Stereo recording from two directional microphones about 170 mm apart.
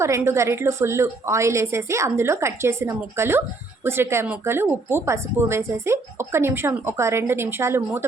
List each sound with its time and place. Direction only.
0.0 s speech: 15° right (ahead or behind)